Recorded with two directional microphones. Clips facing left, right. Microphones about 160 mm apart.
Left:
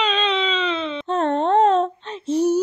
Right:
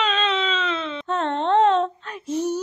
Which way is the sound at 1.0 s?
40° left (ahead or behind).